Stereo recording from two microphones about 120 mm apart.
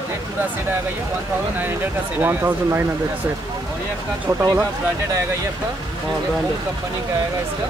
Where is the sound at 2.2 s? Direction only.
15° right (ahead or behind).